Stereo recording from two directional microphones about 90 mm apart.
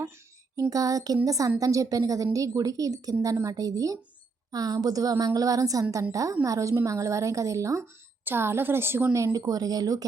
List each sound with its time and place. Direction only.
0.7 s a woman's voice: 40° right (ahead or behind)
9.1 s a woman's voice: 35° right (ahead or behind)